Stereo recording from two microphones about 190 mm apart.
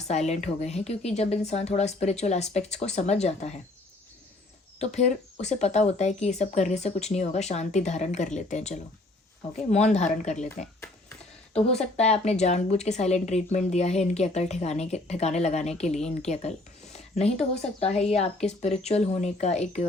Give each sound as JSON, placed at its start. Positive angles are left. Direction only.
{"t": 0.0, "sound": "speech", "side_deg": 35}
{"t": 4.8, "sound": "speech", "side_deg": 35}